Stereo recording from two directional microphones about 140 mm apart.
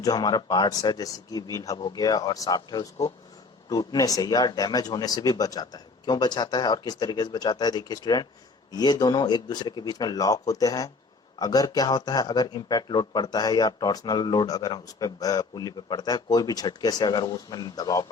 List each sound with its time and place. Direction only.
0.0 s speech: 30° left (ahead or behind)